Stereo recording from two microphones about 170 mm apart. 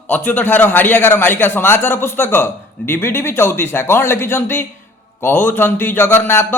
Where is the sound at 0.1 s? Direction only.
10° left (ahead or behind).